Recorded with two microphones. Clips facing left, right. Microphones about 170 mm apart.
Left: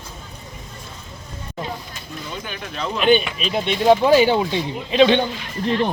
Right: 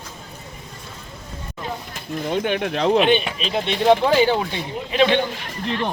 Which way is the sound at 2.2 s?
65° right (ahead or behind).